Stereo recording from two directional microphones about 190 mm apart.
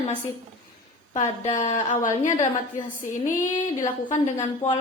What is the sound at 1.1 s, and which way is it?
A woman's voice, 40° left (ahead or behind).